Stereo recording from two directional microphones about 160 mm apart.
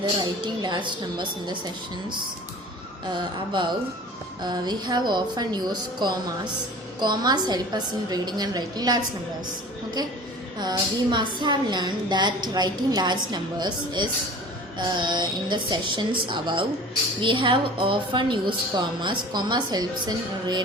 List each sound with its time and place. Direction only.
0.2 s a woman's voice: 30° right (ahead or behind)
10.6 s a woman's voice: 30° right (ahead or behind)